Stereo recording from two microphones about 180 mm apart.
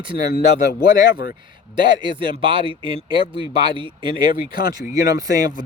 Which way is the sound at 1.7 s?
25° right (ahead or behind).